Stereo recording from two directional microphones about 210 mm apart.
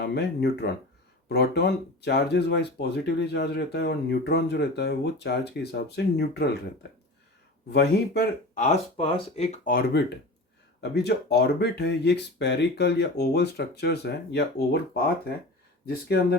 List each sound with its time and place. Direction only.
0.0 s speech: 50° left (ahead or behind)
7.7 s speech: 50° left (ahead or behind)
9.0 s speech: 25° left (ahead or behind); by 16.4 s 50° left (ahead or behind)